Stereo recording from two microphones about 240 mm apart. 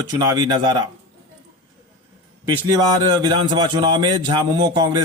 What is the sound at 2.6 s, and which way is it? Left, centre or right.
A man's voice, centre.